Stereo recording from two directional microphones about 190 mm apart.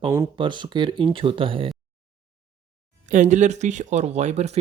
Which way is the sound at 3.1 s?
40° right (ahead or behind).